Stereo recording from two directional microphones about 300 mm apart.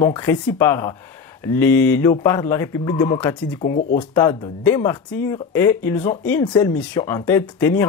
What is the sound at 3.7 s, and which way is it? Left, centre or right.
Speech, left.